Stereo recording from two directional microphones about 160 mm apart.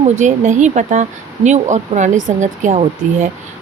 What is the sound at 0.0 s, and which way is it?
Speech, 50° right (ahead or behind).